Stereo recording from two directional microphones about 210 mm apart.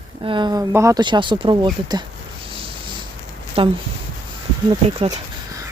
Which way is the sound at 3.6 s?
25° right (ahead or behind).